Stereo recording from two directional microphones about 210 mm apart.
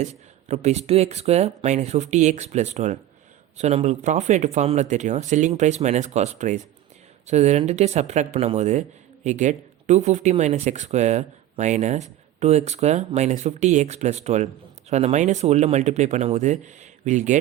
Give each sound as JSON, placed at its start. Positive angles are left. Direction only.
{"t": 0.0, "sound": "speech", "side_deg": -30}